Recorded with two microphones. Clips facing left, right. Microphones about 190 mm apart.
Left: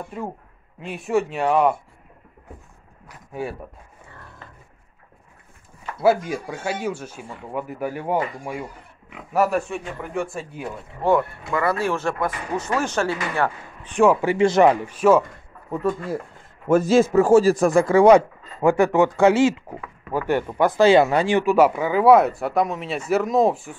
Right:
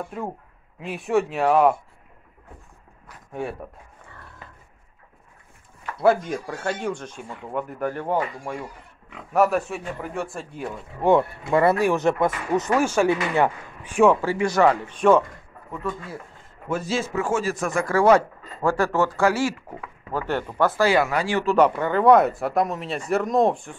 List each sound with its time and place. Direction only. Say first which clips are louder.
0.1 s speech: even; centre (ahead or behind)
3.4 s speech: left 1 dB; 5° left (ahead or behind)
5.9 s speech: left 1 dB; 5° left (ahead or behind)
11.0 s speech: right 1 dB; 20° right (ahead or behind)
14.2 s speech: left 4 dB; 25° left (ahead or behind); by 15.2 s 5° left (ahead or behind)
15.7 s speech: left 7 dB; 40° left (ahead or behind)
17.9 s speech: left 3 dB; 15° left (ahead or behind)
21.5 s speech: left 2 dB; 5° left (ahead or behind)